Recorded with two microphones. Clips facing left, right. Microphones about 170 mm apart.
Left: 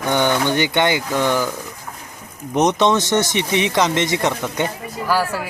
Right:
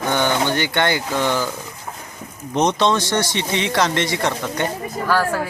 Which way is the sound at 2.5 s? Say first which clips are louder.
Left 2 dB; 15° left (ahead or behind).